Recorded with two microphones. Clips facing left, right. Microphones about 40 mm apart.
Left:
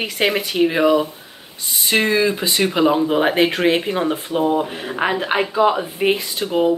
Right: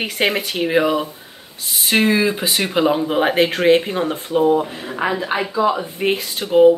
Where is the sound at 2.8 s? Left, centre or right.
Centre.